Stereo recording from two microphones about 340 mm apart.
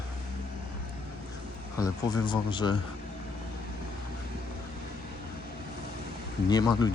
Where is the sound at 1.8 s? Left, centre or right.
Centre.